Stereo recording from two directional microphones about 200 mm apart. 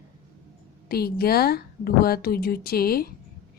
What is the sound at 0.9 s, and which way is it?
Speech, 50° left (ahead or behind).